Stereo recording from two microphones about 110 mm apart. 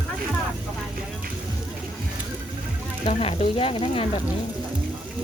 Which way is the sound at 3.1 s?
60° left (ahead or behind).